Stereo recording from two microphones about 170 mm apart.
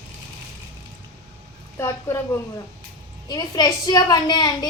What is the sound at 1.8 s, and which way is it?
A woman's voice, 15° left (ahead or behind).